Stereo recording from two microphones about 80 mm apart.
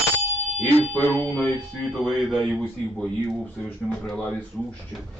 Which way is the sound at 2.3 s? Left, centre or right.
Centre.